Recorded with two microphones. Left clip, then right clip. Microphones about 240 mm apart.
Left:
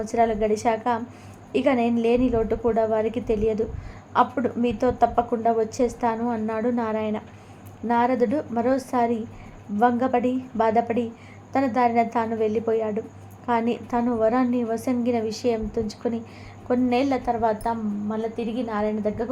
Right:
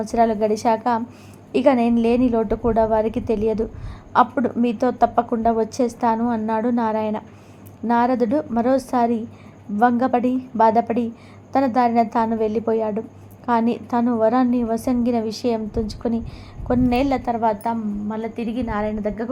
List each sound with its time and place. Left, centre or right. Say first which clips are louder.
0.0 s a woman's voice: right 3 dB; right